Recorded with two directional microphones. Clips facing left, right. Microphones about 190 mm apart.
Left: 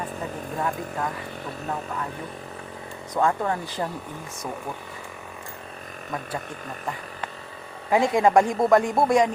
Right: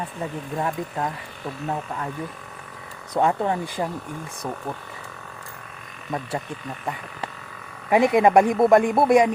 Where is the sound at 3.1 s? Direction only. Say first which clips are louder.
Right 2 dB; 20° right (ahead or behind).